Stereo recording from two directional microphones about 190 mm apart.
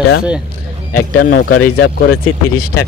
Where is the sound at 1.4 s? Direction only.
85° left.